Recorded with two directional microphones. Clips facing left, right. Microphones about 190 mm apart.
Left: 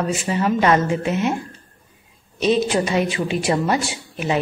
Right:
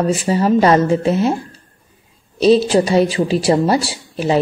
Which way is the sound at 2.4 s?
35° right (ahead or behind).